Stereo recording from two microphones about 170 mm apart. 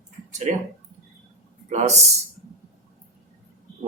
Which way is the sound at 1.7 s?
40° right (ahead or behind).